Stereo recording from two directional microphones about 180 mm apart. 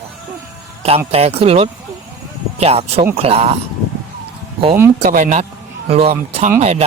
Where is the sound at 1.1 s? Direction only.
35° right (ahead or behind).